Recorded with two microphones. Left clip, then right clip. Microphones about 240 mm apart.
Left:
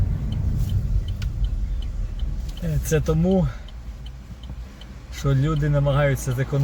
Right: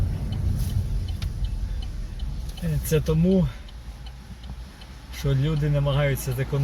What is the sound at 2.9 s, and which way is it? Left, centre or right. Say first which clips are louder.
Speech: left 1 dB; left.